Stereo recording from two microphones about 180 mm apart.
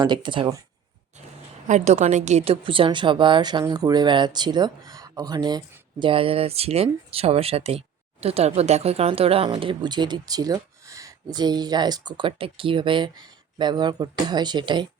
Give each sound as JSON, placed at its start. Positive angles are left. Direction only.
{"t": 0.0, "sound": "a woman's voice", "side_deg": -25}
{"t": 1.6, "sound": "a woman's voice", "side_deg": -40}